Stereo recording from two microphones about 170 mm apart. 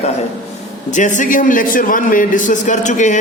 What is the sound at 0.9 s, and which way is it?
A man's voice, 45° left (ahead or behind).